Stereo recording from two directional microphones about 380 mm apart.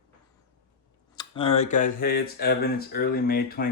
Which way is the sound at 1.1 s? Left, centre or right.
Centre.